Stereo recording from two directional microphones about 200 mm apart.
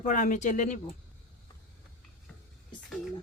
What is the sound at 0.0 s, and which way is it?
Speech, 40° left (ahead or behind).